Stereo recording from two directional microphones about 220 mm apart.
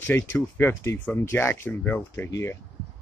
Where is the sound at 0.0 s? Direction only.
10° left (ahead or behind).